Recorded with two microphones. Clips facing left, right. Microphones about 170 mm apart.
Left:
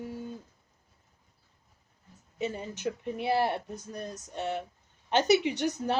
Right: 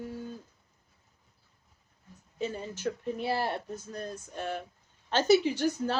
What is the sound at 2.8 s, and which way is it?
Speech, 20° left (ahead or behind).